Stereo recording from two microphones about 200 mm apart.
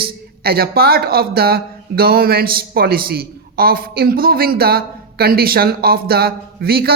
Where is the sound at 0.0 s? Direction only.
50° right (ahead or behind).